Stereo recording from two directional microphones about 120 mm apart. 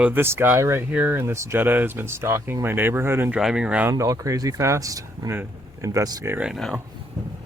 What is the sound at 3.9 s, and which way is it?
Speech, 25° right (ahead or behind).